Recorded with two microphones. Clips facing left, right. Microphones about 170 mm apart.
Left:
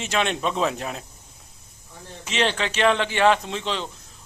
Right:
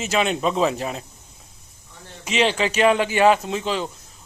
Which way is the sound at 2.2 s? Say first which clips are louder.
Right 4 dB; 10° right (ahead or behind).